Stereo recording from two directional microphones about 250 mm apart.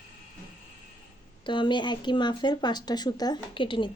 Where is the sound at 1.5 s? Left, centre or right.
Centre.